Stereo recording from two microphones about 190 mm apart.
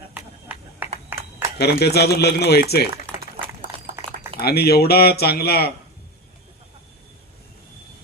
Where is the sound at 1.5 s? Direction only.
55° left (ahead or behind).